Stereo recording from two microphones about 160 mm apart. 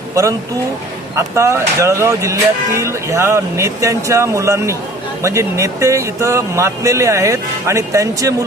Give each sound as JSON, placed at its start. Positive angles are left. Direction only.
{"t": 0.1, "sound": "speech", "side_deg": -20}